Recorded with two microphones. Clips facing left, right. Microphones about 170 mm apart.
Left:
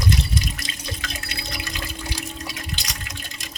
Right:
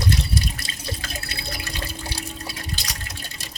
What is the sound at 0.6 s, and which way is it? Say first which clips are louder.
Drip: even; 35° right (ahead or behind).